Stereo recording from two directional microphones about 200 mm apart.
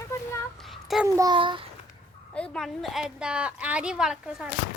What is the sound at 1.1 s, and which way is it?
Speech, 20° right (ahead or behind).